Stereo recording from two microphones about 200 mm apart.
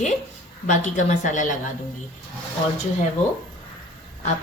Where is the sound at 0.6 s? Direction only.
40° left (ahead or behind).